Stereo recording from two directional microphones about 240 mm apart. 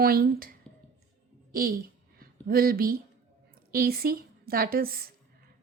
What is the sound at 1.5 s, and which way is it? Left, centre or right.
A woman's voice, right.